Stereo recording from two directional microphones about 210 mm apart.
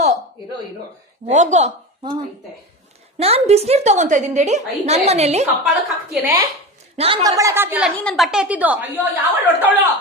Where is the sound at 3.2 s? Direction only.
30° right (ahead or behind).